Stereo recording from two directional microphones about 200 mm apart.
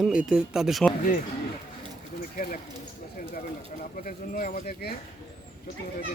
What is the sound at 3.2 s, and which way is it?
Speech, 45° left (ahead or behind).